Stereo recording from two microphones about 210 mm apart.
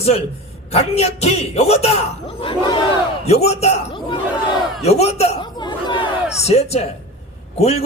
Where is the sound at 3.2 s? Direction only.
30° left (ahead or behind).